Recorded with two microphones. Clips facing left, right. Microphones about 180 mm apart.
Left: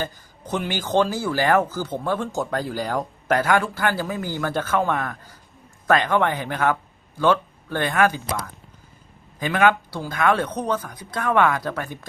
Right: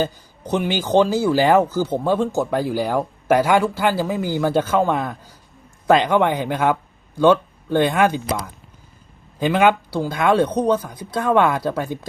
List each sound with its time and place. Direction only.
0.0 s speech: 15° right (ahead or behind)
9.6 s speech: 15° right (ahead or behind)